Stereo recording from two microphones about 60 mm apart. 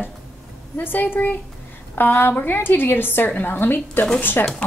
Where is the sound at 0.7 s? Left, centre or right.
Left.